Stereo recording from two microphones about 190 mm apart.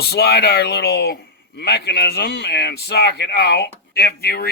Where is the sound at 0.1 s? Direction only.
55° left (ahead or behind).